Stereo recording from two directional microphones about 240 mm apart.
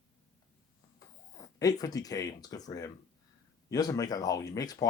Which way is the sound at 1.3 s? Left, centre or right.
Centre.